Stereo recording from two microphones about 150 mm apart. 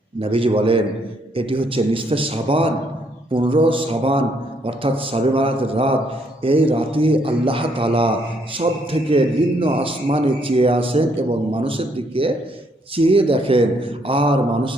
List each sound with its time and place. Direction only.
0.2 s a man's voice: 40° right (ahead or behind)